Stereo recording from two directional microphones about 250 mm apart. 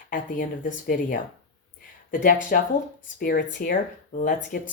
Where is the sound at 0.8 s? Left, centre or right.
Left.